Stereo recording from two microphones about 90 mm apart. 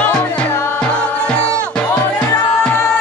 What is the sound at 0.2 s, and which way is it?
Music, 20° left (ahead or behind).